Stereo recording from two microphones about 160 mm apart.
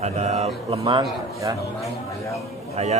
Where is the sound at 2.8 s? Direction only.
45° right (ahead or behind).